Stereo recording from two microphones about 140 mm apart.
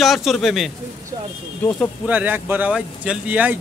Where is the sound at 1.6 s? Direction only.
15° left (ahead or behind).